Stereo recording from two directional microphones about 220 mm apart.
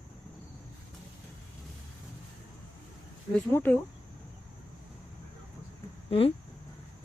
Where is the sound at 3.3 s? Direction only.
10° left (ahead or behind).